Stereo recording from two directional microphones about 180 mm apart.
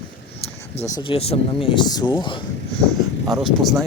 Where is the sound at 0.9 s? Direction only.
30° left (ahead or behind).